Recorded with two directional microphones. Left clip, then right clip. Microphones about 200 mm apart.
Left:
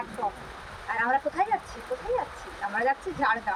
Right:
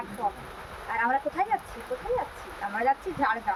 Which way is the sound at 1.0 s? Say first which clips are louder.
Left 1 dB; 5° left (ahead or behind).